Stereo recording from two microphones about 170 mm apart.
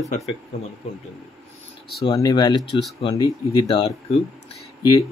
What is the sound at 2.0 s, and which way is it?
Speech, 25° left (ahead or behind).